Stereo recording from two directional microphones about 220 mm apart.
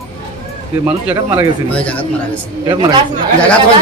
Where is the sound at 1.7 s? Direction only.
5° left (ahead or behind).